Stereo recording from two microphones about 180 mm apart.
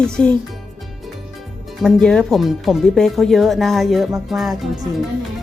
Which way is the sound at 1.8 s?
5° left (ahead or behind).